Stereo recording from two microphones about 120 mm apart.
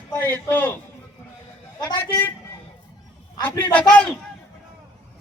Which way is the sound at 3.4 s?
20° left (ahead or behind).